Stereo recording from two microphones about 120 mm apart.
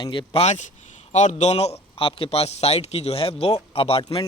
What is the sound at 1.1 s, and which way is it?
Speech, 75° left (ahead or behind).